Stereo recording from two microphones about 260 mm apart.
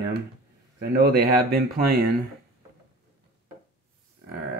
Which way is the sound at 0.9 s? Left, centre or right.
Right.